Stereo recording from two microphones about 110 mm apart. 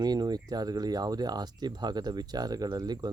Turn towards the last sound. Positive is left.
turn(degrees=-35)  # may be behind; listen again after turning